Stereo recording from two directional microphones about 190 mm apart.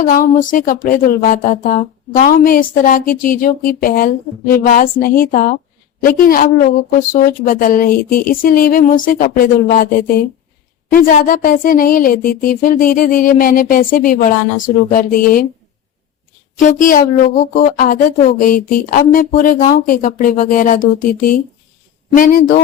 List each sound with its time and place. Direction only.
0.0 s speech: 45° left (ahead or behind)
10.9 s speech: 45° left (ahead or behind)
16.6 s speech: 45° left (ahead or behind)